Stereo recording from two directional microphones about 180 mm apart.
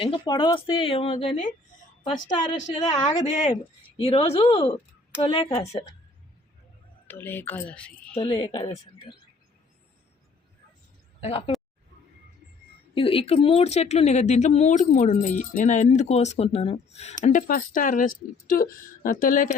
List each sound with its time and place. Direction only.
0.0 s speech: 30° left (ahead or behind)
2.9 s speech: 40° left (ahead or behind)
7.1 s speech: 10° left (ahead or behind)
8.1 s speech: 25° left (ahead or behind)
11.2 s speech: 35° left (ahead or behind)
12.9 s speech: 30° left (ahead or behind); by 19.5 s 50° left (ahead or behind)